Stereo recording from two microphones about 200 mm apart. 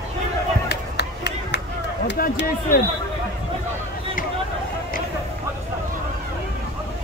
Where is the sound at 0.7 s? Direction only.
55° left (ahead or behind).